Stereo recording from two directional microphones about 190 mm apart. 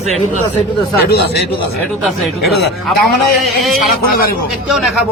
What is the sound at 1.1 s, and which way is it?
Speech, 55° left (ahead or behind).